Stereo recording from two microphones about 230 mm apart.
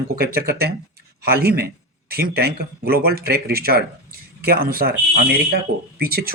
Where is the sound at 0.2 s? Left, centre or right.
Right.